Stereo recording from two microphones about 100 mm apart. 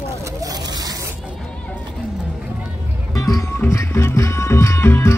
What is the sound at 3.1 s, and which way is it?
Music, 30° left (ahead or behind).